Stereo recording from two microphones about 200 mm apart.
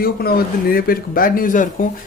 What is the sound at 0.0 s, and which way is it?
Speech, 50° left (ahead or behind).